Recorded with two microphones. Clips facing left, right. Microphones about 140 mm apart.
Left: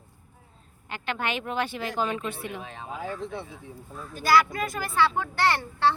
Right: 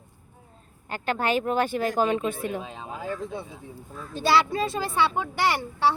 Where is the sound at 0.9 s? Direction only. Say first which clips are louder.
Right 5 dB; 40° right (ahead or behind).